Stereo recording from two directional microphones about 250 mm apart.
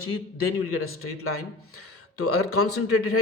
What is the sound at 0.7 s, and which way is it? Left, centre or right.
A man's voice, left.